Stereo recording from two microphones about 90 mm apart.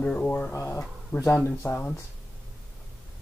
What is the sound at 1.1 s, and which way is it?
Speech, 35° left (ahead or behind).